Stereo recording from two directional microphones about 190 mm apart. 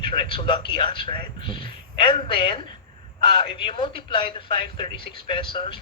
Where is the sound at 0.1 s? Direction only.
25° left (ahead or behind).